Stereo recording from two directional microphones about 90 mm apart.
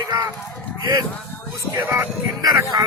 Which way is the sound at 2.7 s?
45° right (ahead or behind).